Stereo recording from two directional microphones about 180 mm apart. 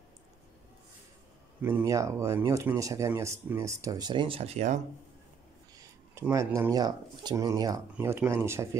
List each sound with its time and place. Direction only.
1.6 s speech: 10° right (ahead or behind); by 4.7 s 40° right (ahead or behind)
6.1 s speech: 15° right (ahead or behind)